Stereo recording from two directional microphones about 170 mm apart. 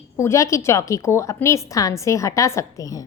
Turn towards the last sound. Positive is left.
turn(degrees=20)  # may be behind; listen again after turning